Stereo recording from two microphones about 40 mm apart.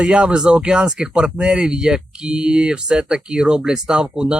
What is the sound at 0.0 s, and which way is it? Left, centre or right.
Speech, right.